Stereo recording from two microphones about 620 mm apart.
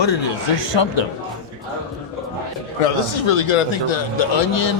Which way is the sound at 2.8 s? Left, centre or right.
Left.